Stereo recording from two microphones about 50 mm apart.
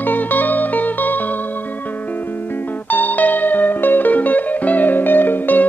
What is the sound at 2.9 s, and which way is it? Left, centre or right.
Music, left.